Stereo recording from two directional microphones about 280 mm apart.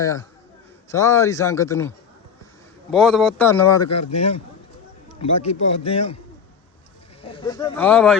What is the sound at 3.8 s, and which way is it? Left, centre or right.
Speech, left.